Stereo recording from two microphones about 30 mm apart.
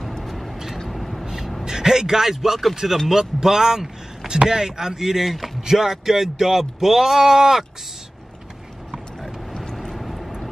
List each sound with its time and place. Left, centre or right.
0.2 s vehicle: centre
0.8 s a sound: centre
1.2 s gasp: centre
1.6 s a man's voice: right
5.3 s a sound: centre
5.6 s speech: centre
9.9 s vehicle: centre